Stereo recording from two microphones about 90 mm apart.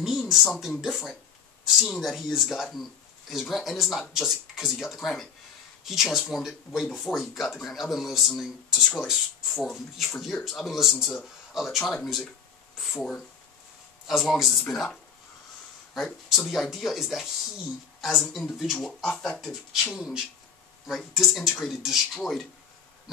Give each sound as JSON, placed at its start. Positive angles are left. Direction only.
{"t": 0.0, "sound": "speech", "side_deg": -5}